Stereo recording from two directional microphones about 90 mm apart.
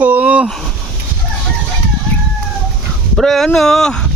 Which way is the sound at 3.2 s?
5° left (ahead or behind).